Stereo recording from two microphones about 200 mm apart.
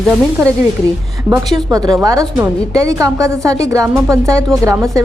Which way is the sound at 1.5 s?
20° right (ahead or behind).